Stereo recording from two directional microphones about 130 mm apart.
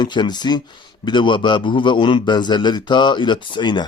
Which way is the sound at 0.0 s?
35° left (ahead or behind).